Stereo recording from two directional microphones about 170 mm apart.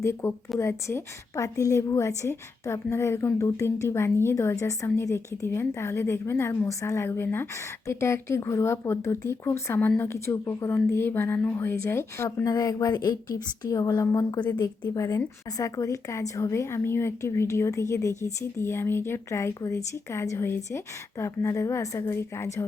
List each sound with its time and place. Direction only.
0.0 s speech: 15° left (ahead or behind)